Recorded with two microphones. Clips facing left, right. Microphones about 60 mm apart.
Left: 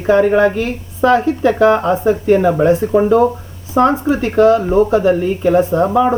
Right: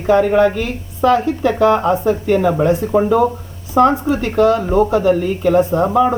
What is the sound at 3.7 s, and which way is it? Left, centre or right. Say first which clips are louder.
Speech: even; left.